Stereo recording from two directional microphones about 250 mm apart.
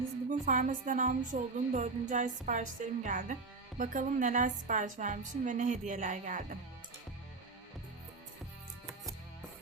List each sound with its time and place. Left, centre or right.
0.3 s a woman's voice: right